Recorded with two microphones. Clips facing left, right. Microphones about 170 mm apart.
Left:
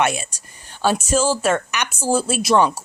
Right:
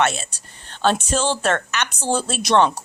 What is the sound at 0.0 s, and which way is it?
Speech, 10° left (ahead or behind).